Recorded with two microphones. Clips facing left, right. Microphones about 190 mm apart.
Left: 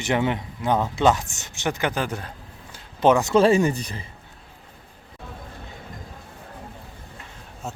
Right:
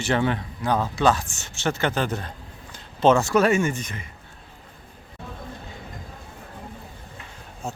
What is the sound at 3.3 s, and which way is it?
Speech, 30° left (ahead or behind).